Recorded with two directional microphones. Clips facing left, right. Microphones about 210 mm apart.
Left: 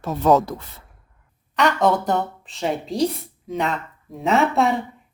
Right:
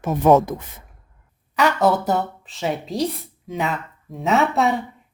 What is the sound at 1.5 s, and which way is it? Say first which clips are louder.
Speech: right 1 dB; 5° right (ahead or behind).